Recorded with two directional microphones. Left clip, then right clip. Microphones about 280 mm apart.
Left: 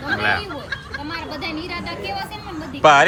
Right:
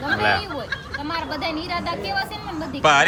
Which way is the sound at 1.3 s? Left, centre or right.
Centre.